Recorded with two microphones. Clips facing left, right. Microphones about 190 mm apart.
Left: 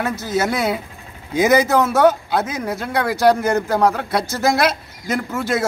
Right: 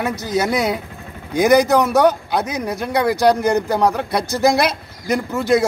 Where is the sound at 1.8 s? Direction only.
15° right (ahead or behind).